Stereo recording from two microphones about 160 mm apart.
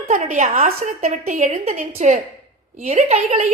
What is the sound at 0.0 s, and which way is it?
A woman's voice, 50° right (ahead or behind).